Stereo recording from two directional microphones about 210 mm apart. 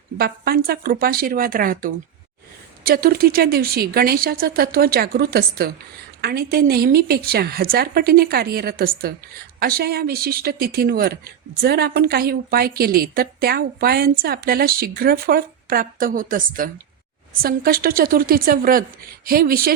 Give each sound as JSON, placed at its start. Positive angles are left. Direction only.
{"t": 0.2, "sound": "a woman's voice", "side_deg": -45}